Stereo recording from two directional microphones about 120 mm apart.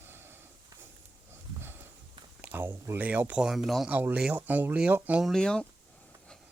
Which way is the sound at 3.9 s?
15° right (ahead or behind).